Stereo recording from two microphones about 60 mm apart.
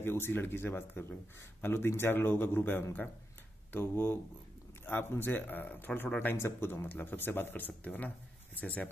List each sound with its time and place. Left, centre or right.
0.0 s speech: left